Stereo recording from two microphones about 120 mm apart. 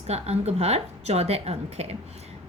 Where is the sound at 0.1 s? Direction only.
65° right (ahead or behind).